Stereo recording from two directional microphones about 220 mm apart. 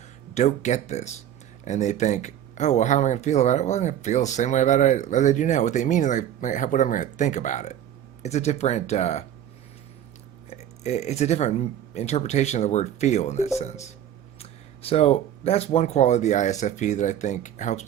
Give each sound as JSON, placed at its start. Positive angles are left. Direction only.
{"t": 0.3, "sound": "speech", "side_deg": 30}
{"t": 10.5, "sound": "speech", "side_deg": 30}